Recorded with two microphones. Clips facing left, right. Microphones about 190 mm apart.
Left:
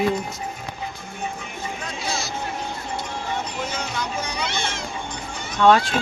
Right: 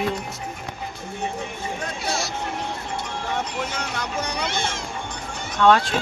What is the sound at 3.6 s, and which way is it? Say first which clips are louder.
Speech: left 1 dB; 70° right (ahead or behind).